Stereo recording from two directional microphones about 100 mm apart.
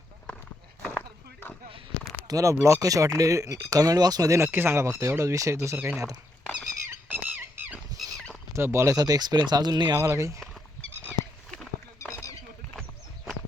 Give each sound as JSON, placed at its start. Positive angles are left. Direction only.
{"t": 0.9, "sound": "a sound", "side_deg": 15}
{"t": 2.2, "sound": "speech", "side_deg": -35}
{"t": 4.4, "sound": "speech", "side_deg": -20}
{"t": 5.7, "sound": "speech", "side_deg": -20}
{"t": 7.1, "sound": "squeak", "side_deg": -15}
{"t": 8.5, "sound": "speech", "side_deg": -30}
{"t": 10.0, "sound": "speech", "side_deg": -30}
{"t": 12.0, "sound": "a sound", "side_deg": 30}